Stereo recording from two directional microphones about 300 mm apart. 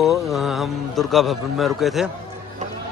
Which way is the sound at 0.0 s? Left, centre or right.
Centre.